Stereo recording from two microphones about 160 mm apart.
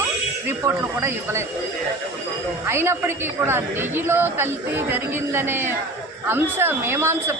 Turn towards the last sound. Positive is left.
turn(degrees=-15)  # may be behind; listen again after turning